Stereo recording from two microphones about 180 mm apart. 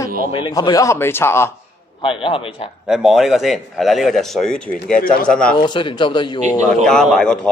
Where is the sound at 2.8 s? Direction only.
5° right (ahead or behind).